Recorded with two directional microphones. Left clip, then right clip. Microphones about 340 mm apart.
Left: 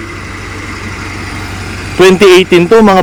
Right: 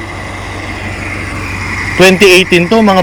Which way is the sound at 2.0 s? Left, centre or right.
Centre.